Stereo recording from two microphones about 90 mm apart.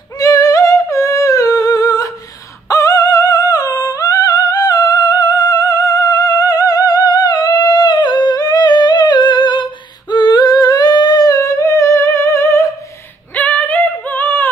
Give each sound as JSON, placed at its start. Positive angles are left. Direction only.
{"t": 0.2, "sound": "humming", "side_deg": 40}
{"t": 13.3, "sound": "singing", "side_deg": 15}